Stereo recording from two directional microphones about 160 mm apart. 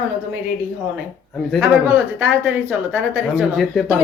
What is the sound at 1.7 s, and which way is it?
A woman's voice, 10° right (ahead or behind).